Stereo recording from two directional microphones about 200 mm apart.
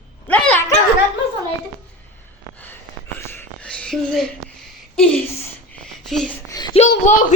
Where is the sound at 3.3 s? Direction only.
10° left (ahead or behind).